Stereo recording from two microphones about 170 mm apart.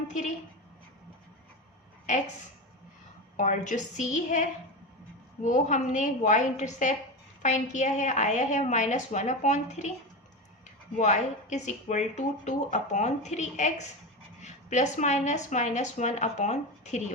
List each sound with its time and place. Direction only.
3.3 s speech: 50° left (ahead or behind)
10.9 s speech: 45° left (ahead or behind)